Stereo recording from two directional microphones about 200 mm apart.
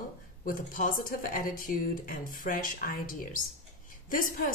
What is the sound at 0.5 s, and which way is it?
Speech, 45° left (ahead or behind).